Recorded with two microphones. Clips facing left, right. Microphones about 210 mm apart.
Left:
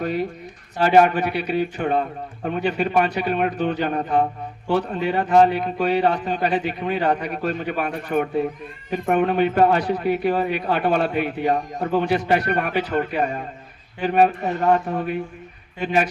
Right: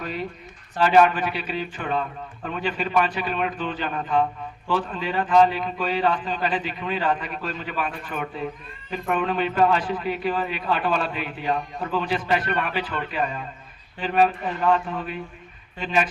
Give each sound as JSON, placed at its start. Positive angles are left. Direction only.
{"t": 0.0, "sound": "a man's voice", "side_deg": 45}
{"t": 4.9, "sound": "a man's voice", "side_deg": 65}
{"t": 5.2, "sound": "a man's voice", "side_deg": 50}